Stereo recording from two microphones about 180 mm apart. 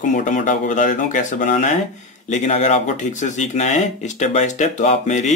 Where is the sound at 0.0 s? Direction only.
45° left (ahead or behind).